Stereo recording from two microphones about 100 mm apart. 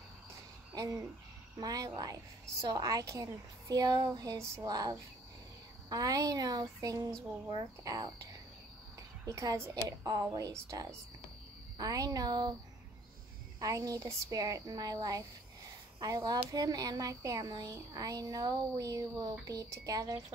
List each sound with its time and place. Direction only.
0.7 s cricket: 40° right (ahead or behind)
1.6 s a woman's voice: 40° right (ahead or behind)
13.6 s a woman's voice: 35° right (ahead or behind)